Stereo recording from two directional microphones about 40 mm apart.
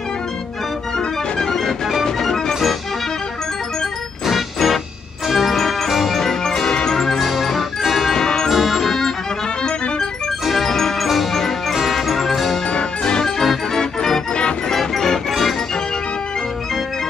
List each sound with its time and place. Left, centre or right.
0.9 s organ: centre
2.0 s music: centre
4.3 s music: centre
6.1 s music: centre
7.2 s music: centre
8.2 s music: centre
8.5 s music: centre
10.4 s music: centre
10.7 s music: centre
11.7 s music: centre
12.7 s music: centre
14.3 s music: left
14.8 s music: centre